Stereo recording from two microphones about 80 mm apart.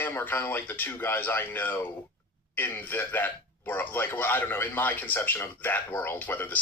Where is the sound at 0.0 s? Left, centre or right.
Left.